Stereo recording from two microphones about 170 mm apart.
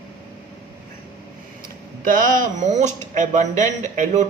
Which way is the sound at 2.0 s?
50° right (ahead or behind).